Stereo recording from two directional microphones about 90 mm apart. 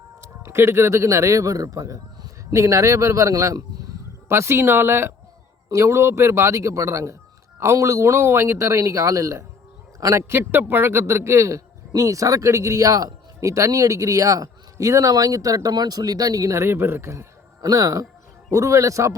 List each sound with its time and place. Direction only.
0.2 s a man's voice: 30° right (ahead or behind)